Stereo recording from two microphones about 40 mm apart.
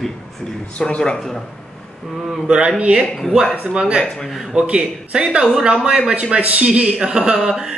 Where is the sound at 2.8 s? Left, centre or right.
Right.